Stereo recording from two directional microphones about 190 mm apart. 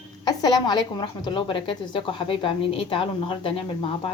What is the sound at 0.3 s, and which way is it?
Speech, 20° left (ahead or behind).